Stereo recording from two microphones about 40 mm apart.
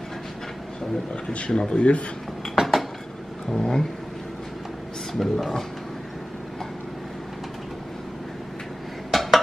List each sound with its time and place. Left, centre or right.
1.5 s speech: left
2.5 s cutlery: centre
3.4 s speech: centre
5.2 s speech: centre
9.1 s dishes: centre